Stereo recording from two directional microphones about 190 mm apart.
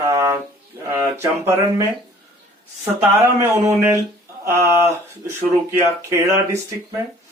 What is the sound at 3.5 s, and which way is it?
Speech, 15° right (ahead or behind).